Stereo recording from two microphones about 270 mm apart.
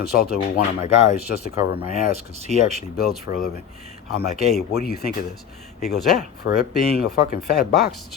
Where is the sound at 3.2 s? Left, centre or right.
Left.